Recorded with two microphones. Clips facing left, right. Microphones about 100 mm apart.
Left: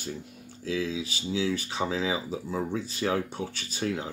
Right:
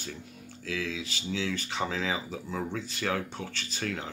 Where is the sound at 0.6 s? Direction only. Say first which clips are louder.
Left 4 dB; 25° left (ahead or behind).